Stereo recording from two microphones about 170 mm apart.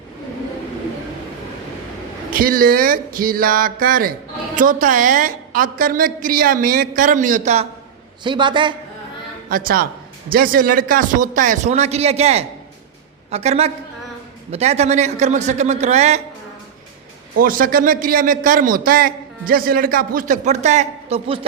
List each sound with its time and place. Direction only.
2.3 s a man's voice: 55° right (ahead or behind); by 7.7 s 40° right (ahead or behind)
8.2 s a man's voice: 30° right (ahead or behind)
9.5 s a man's voice: 55° right (ahead or behind); by 16.2 s 40° right (ahead or behind)
17.4 s a man's voice: 55° right (ahead or behind); by 21.4 s 35° right (ahead or behind)